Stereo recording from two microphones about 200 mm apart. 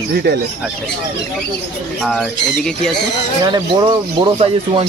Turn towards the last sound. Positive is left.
turn(degrees=-25)  # may be behind; listen again after turning